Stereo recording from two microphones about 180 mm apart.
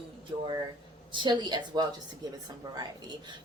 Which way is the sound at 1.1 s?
25° right (ahead or behind).